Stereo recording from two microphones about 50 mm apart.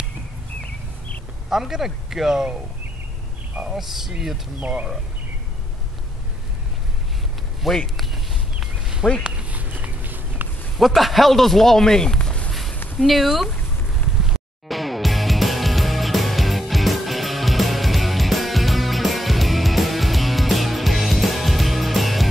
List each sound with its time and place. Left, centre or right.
1.5 s speech: centre
3.6 s speech: centre
4.6 s speech: right
7.6 s speech: centre
8.1 s a sound: centre
9.2 s a sound: right
10.8 s speech: centre
13.0 s speech: centre
14.7 s music: centre